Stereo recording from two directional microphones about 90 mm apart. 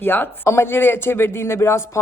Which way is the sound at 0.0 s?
20° left (ahead or behind).